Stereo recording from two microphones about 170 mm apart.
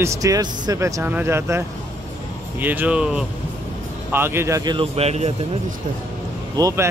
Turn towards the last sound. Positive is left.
turn(degrees=-20)  # may be behind; listen again after turning